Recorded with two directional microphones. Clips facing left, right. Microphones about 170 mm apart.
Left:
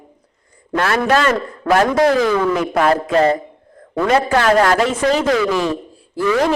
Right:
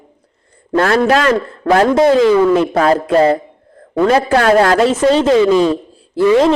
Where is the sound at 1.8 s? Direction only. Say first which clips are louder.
Right 5 dB; 25° right (ahead or behind).